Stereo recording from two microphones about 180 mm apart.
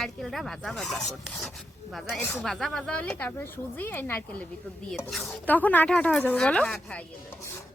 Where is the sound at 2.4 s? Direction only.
Centre (ahead or behind).